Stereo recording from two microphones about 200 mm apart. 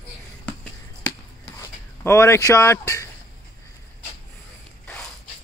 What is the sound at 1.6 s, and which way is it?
Speech, 15° left (ahead or behind).